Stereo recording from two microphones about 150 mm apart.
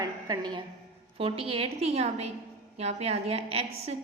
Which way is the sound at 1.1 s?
40° right (ahead or behind).